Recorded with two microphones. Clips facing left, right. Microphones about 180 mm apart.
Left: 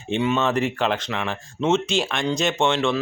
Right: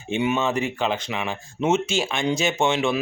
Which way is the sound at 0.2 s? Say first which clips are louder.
Left 1 dB; 15° right (ahead or behind).